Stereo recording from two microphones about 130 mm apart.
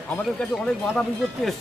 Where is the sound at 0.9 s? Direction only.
Centre (ahead or behind).